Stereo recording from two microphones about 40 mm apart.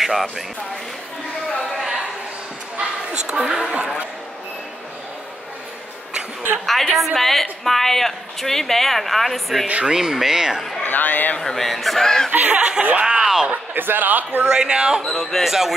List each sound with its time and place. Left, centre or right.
0.0 s speech: centre
3.3 s speech: centre
6.6 s speech: centre
9.8 s speech: centre
10.8 s a man's voice: left
11.4 s speech: centre
12.0 s speech: centre
12.3 s speech: right
12.5 s speech: right
13.0 s a sound: right
13.7 s speech: right
14.4 s speech: right
15.0 s speech: centre
15.4 s speech: centre